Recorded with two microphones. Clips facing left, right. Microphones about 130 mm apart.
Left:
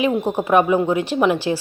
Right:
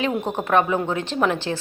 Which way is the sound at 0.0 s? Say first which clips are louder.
Left 4 dB; 10° left (ahead or behind).